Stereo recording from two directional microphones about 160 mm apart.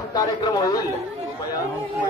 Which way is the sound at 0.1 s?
25° left (ahead or behind).